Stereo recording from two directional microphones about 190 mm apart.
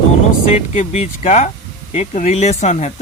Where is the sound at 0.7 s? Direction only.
35° left (ahead or behind).